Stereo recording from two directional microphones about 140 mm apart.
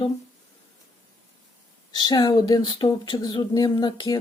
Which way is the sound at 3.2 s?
30° left (ahead or behind).